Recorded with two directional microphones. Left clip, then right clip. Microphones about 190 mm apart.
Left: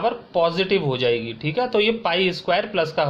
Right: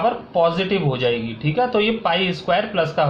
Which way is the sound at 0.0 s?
50° left (ahead or behind).